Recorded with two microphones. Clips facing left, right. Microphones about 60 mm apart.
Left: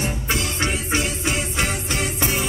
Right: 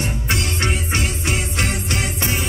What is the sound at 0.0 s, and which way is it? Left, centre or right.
Music, centre.